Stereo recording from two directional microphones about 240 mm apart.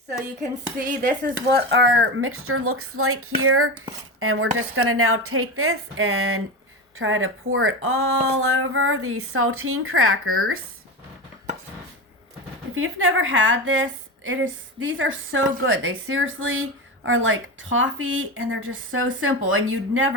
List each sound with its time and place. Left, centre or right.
0.9 s speech: right
1.4 s a woman's voice: right
12.7 s a woman's voice: right